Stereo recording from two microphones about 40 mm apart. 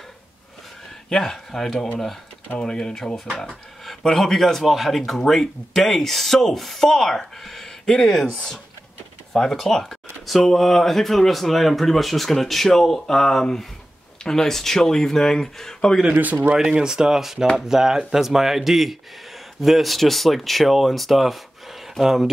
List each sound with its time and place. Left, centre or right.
1.1 s speech: centre
9.3 s a sound: centre
10.4 s speech: centre
16.6 s speech: right